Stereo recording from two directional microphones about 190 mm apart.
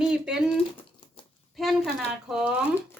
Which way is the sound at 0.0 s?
5° right (ahead or behind).